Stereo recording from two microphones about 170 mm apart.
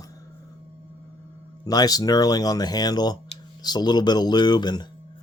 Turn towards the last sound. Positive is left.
turn(degrees=25)  # may be behind; listen again after turning